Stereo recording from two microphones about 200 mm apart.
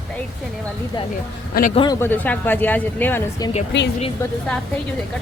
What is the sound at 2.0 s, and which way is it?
Speech, 10° left (ahead or behind).